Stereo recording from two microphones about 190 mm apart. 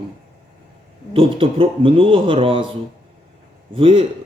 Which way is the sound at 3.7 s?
30° right (ahead or behind).